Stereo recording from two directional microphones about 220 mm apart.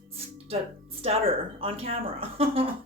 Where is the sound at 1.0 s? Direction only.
25° right (ahead or behind).